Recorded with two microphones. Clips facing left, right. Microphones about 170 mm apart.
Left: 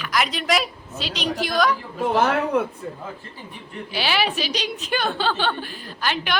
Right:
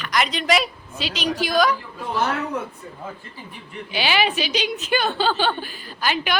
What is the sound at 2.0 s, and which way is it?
Speech, 60° left (ahead or behind).